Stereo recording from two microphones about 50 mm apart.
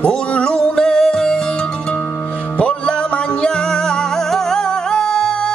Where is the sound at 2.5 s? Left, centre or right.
Left.